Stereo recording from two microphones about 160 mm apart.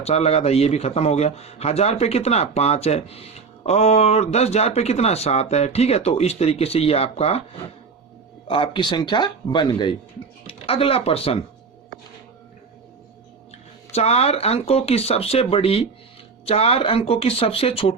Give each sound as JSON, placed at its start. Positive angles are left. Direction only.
{"t": 0.0, "sound": "speech", "side_deg": 40}
{"t": 8.4, "sound": "speech", "side_deg": 30}
{"t": 13.9, "sound": "speech", "side_deg": 40}